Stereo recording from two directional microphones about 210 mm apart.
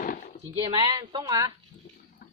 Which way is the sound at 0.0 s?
35° left (ahead or behind).